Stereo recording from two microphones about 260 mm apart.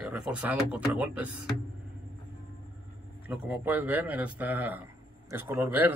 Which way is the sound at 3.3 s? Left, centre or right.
Centre.